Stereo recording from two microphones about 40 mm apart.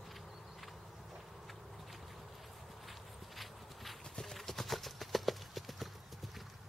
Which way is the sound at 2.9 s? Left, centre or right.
Centre.